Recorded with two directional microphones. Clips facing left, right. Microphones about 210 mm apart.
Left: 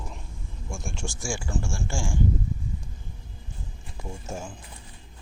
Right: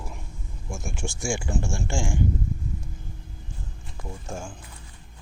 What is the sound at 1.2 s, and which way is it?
Speech, 15° right (ahead or behind).